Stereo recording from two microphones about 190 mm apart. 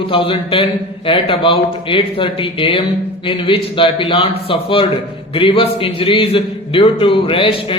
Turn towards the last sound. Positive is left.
turn(degrees=30)  # may be behind; listen again after turning